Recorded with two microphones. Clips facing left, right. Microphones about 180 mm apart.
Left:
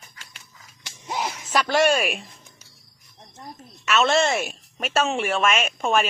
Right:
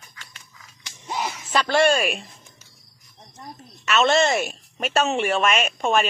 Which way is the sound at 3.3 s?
Centre (ahead or behind).